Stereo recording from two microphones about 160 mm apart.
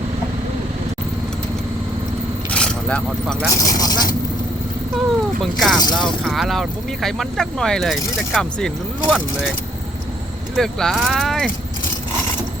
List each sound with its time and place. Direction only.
2.5 s speech: 5° left (ahead or behind)
3.5 s speech: 25° left (ahead or behind)
5.4 s speech: centre (ahead or behind)
10.5 s speech: centre (ahead or behind)